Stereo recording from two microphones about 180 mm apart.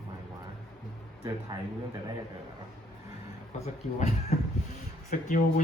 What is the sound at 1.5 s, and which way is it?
Speech, 20° right (ahead or behind).